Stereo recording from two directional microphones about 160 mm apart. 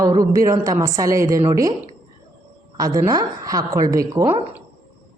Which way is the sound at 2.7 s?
20° right (ahead or behind).